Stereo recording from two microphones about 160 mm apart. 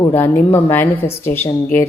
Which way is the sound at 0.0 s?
15° left (ahead or behind).